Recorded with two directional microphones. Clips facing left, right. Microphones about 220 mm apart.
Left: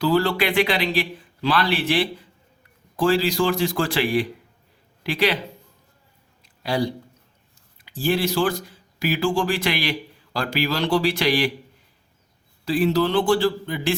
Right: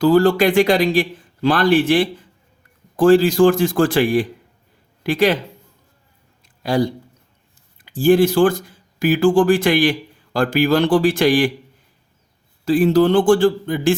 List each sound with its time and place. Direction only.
0.0 s speech: 45° right (ahead or behind)
6.4 s a sound: 45° right (ahead or behind)
7.8 s speech: 50° right (ahead or behind)
12.6 s speech: 50° right (ahead or behind)